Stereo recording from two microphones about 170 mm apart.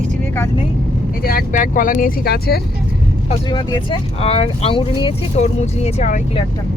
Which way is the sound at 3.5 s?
25° left (ahead or behind).